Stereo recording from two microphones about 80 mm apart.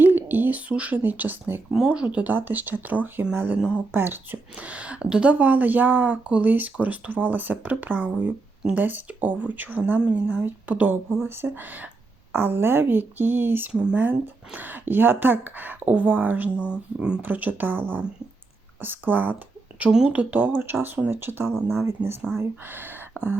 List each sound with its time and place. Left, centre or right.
0.0 s a woman's voice: right
1.7 s a woman's voice: centre
19.8 s a woman's voice: centre